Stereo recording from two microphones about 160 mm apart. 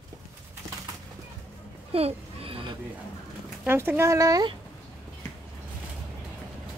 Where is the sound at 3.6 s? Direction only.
15° right (ahead or behind).